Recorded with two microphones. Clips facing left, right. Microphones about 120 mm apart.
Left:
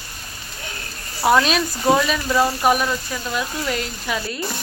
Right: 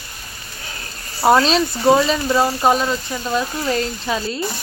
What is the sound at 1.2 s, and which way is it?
Speech, 30° right (ahead or behind).